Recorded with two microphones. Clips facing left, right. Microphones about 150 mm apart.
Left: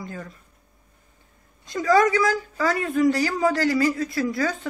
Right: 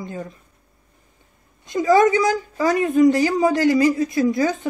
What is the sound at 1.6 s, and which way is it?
A woman's voice, 20° right (ahead or behind).